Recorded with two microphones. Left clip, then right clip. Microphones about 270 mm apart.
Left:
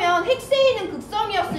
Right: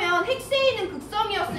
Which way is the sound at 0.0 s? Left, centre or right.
Left.